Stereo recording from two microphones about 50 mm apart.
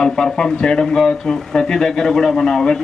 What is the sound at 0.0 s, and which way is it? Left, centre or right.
Speech, centre.